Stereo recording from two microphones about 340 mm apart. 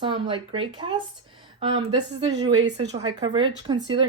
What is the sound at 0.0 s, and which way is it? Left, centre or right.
Speech, centre.